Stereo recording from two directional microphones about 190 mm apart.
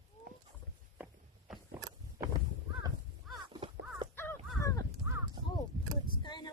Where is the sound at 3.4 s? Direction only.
25° right (ahead or behind).